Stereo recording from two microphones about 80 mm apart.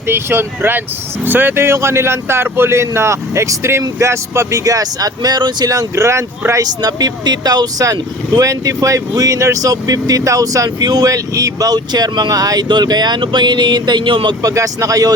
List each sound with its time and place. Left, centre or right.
0.1 s speech: right
6.8 s speech: right
12.6 s speech: right
14.4 s speech: right